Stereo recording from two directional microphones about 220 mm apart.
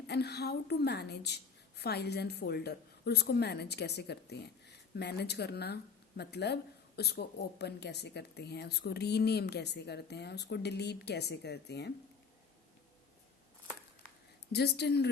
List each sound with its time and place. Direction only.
0.1 s speech: 50° left (ahead or behind)
14.5 s speech: 50° left (ahead or behind)